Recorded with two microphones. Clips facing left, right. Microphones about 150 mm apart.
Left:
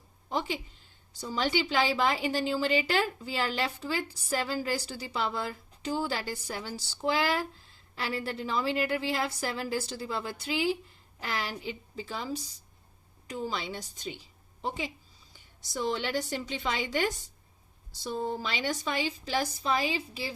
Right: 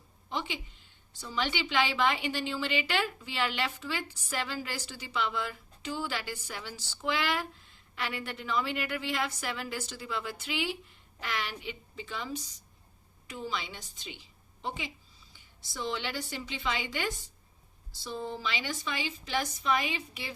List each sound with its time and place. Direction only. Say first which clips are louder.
0.3 s a woman's voice: left 4 dB; 40° left (ahead or behind)
15.3 s a sound: left 8 dB; 45° left (ahead or behind)
16.3 s a woman's voice: left 2 dB; 40° left (ahead or behind)